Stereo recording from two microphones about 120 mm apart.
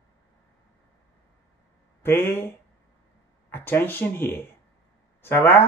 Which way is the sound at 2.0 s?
20° left (ahead or behind).